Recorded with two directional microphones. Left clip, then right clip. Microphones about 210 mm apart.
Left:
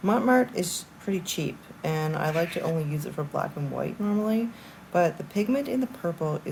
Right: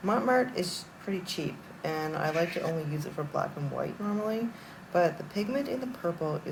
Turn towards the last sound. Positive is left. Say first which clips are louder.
# left 2 dB
turn(degrees=15)  # may be behind; listen again after turning